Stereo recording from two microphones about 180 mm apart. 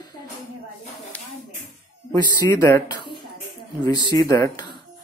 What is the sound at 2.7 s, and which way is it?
Speech, 20° left (ahead or behind).